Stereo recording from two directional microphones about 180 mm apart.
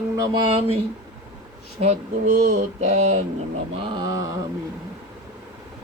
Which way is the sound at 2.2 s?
50° right (ahead or behind).